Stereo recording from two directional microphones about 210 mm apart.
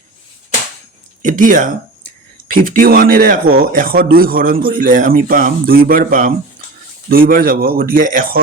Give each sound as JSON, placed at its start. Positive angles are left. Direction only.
{"t": 1.2, "sound": "speech", "side_deg": -40}